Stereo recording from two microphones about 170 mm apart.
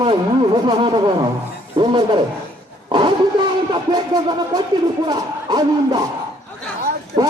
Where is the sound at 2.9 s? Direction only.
30° right (ahead or behind).